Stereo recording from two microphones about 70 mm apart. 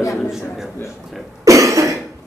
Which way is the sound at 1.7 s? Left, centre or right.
Right.